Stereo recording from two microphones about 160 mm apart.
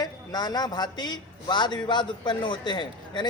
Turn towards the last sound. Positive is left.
turn(degrees=30)  # may be behind; listen again after turning